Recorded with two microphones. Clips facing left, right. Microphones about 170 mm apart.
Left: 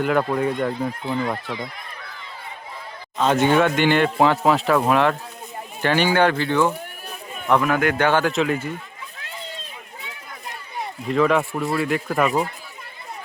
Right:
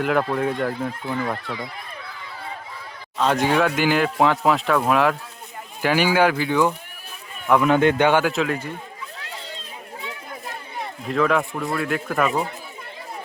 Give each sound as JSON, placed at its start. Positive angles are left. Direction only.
{"t": 0.0, "sound": "speech", "side_deg": 0}
{"t": 1.0, "sound": "speech", "side_deg": 20}
{"t": 3.2, "sound": "speech", "side_deg": 0}
{"t": 7.6, "sound": "speech", "side_deg": -25}
{"t": 8.3, "sound": "speech", "side_deg": 0}
{"t": 11.1, "sound": "speech", "side_deg": 0}